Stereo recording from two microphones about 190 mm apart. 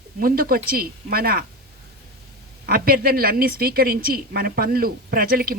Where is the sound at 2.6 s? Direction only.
50° right (ahead or behind).